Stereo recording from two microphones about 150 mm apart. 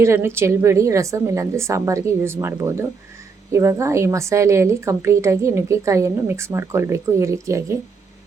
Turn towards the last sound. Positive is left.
turn(degrees=-20)  # may be behind; listen again after turning